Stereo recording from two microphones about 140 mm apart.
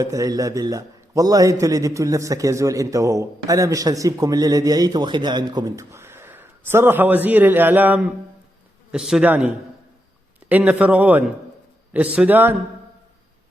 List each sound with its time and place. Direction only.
0.0 s a man's voice: 25° right (ahead or behind); by 9.5 s 10° right (ahead or behind)
10.5 s a man's voice: 10° right (ahead or behind)